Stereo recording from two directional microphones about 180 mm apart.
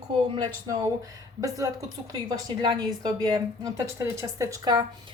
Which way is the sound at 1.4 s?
20° right (ahead or behind).